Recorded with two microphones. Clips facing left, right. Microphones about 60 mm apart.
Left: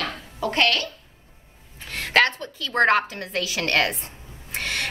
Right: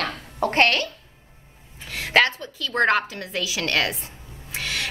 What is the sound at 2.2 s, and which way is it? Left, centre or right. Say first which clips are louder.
A woman's voice: even; left.